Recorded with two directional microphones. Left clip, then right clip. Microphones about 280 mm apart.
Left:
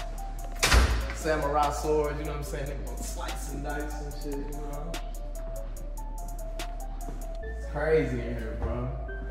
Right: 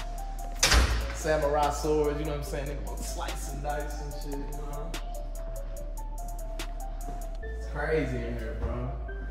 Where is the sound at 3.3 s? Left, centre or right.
Centre.